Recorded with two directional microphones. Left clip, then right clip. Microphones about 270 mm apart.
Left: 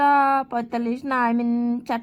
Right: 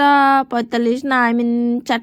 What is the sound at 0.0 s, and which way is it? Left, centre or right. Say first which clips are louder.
A woman's voice: right 5 dB; centre.